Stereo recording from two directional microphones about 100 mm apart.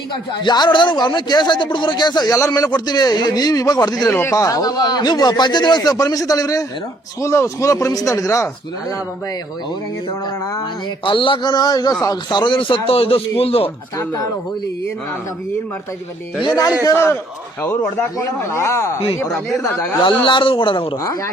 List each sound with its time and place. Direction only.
0.4 s speech: 45° left (ahead or behind)
4.2 s speech: 30° left (ahead or behind)
11.0 s speech: 55° left (ahead or behind)
14.0 s speech: 35° left (ahead or behind)
16.8 s speech: 25° left (ahead or behind)
20.0 s speech: 55° left (ahead or behind)